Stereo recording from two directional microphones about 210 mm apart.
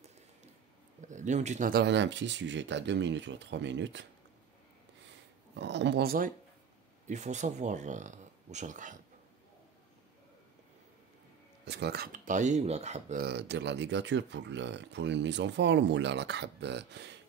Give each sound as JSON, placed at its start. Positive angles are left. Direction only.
{"t": 1.0, "sound": "speech", "side_deg": -35}
{"t": 5.6, "sound": "speech", "side_deg": -55}
{"t": 11.6, "sound": "speech", "side_deg": -55}
{"t": 13.2, "sound": "speech", "side_deg": -50}